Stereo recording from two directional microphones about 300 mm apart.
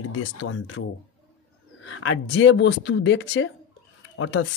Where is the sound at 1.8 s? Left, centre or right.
Left.